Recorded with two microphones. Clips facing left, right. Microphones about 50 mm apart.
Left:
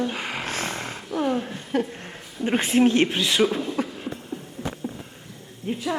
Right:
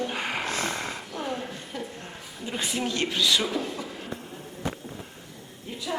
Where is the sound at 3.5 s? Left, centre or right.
Left.